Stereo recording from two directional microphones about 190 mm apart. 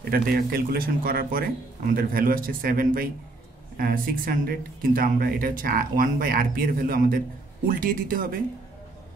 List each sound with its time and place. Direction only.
0.1 s speech: 50° right (ahead or behind)